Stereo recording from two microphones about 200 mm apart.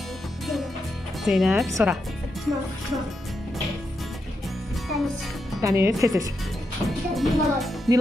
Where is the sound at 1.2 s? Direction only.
Centre (ahead or behind).